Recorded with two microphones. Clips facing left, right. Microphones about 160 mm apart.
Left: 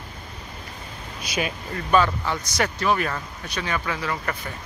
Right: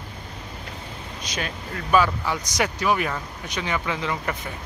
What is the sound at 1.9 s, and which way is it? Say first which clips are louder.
Speech: even; 10° right (ahead or behind).